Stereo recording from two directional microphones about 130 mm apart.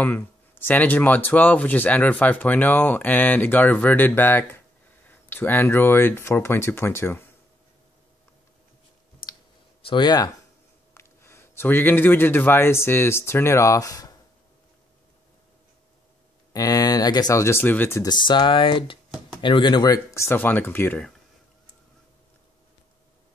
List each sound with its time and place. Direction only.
0.0 s speech: 15° left (ahead or behind)
9.8 s speech: 35° left (ahead or behind)
11.0 s speech: 20° left (ahead or behind)
16.5 s speech: 25° left (ahead or behind)
18.0 s speech: 35° left (ahead or behind)
20.2 s speech: 15° left (ahead or behind)